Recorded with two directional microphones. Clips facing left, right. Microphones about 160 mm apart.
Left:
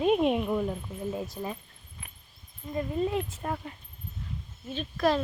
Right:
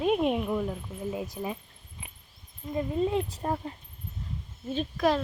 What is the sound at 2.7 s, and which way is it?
Speech, 20° right (ahead or behind).